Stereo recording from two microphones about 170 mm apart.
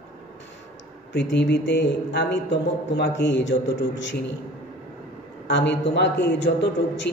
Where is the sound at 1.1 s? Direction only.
90° left.